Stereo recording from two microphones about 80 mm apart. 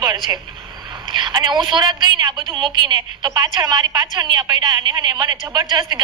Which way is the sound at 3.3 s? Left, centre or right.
Right.